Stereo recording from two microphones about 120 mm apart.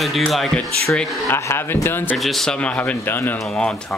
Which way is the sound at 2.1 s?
Centre (ahead or behind).